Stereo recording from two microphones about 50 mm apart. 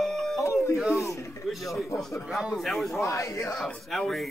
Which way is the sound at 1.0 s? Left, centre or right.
Left.